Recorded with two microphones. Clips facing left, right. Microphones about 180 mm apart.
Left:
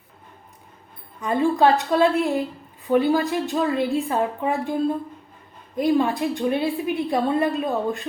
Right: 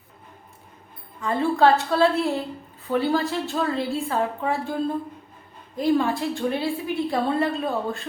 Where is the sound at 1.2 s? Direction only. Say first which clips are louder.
Left 1 dB; 15° left (ahead or behind).